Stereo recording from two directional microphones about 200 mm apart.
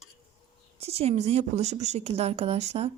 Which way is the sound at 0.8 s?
30° right (ahead or behind).